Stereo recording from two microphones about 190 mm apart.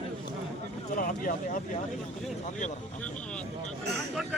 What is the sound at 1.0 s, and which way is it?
Speech, 45° left (ahead or behind).